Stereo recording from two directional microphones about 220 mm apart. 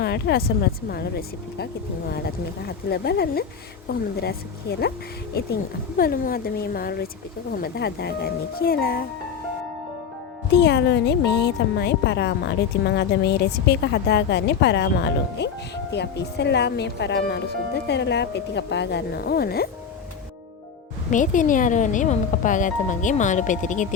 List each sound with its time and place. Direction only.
0.0 s a woman's voice: 45° left (ahead or behind)
6.0 s a woman's voice: 45° left (ahead or behind)
10.6 s a woman's voice: 50° left (ahead or behind)
21.1 s speech: 35° left (ahead or behind)